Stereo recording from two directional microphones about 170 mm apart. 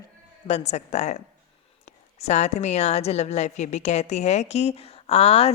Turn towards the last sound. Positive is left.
turn(degrees=35)  # may be behind; listen again after turning